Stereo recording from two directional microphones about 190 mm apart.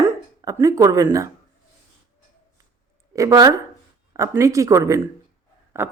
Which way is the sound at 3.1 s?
20° right (ahead or behind).